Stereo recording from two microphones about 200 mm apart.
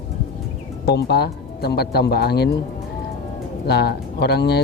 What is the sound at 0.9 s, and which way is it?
Speech, 55° left (ahead or behind).